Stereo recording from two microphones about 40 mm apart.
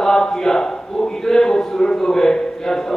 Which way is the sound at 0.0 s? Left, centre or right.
Centre.